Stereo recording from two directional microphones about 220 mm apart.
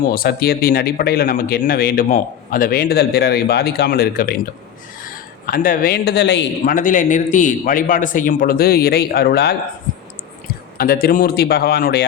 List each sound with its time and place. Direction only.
0.0 s speech: 40° left (ahead or behind)
5.5 s speech: 40° left (ahead or behind)
6.7 s a man's voice: 35° left (ahead or behind)
10.8 s speech: 40° left (ahead or behind)